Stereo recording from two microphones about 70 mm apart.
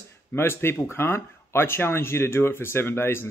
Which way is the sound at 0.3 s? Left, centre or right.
Left.